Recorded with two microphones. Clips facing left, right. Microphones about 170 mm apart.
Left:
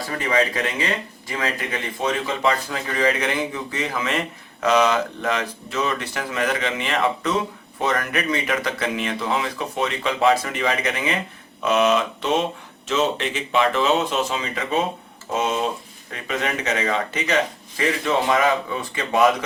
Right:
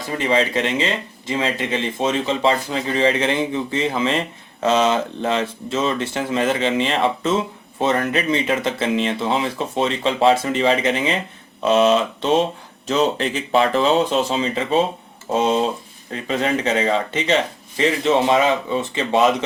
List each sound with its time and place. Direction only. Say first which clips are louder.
0.1 s speech: right 3 dB; 25° right (ahead or behind)